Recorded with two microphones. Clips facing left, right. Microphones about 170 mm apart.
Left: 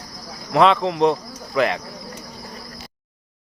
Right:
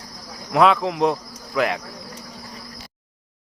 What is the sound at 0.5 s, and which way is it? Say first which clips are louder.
Speech: left 1 dB; 5° right (ahead or behind).